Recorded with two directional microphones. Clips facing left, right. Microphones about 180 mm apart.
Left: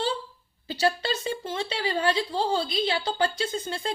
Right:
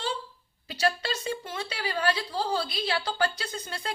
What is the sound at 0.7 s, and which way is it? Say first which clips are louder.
A woman's voice: left 3 dB; 30° left (ahead or behind).